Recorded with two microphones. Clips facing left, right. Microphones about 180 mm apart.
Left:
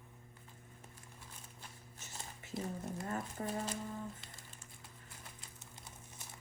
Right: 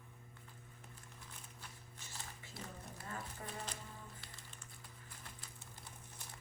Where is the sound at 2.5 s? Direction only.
20° left (ahead or behind).